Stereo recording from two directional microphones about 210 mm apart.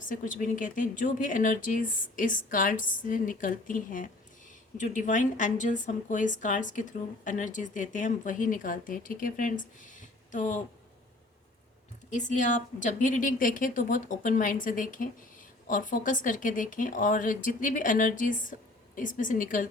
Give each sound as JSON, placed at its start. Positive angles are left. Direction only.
{"t": 0.0, "sound": "a woman's voice", "side_deg": 40}
{"t": 12.1, "sound": "a woman's voice", "side_deg": 35}